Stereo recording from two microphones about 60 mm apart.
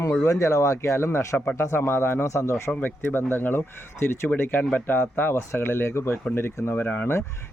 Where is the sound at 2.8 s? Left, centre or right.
Left.